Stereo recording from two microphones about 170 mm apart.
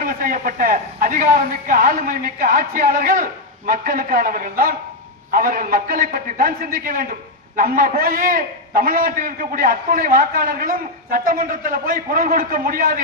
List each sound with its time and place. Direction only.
0.0 s a man's voice: 55° right (ahead or behind)